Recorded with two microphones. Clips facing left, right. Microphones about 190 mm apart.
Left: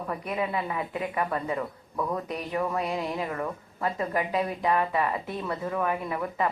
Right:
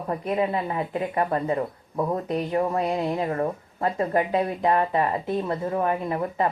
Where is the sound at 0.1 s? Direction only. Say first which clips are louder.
Right 6 dB; 35° right (ahead or behind).